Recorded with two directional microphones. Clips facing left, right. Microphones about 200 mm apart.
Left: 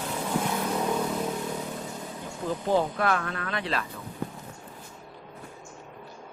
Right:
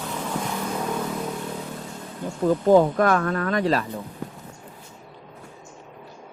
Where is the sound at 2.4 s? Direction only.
45° right (ahead or behind).